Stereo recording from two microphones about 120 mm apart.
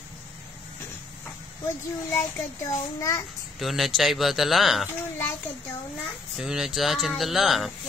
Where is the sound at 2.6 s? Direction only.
30° left (ahead or behind).